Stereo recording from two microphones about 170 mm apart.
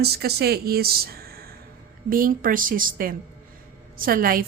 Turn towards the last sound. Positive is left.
turn(degrees=-60)  # may be behind; listen again after turning